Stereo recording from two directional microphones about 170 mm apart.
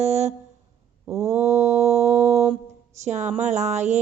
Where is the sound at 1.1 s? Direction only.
15° right (ahead or behind).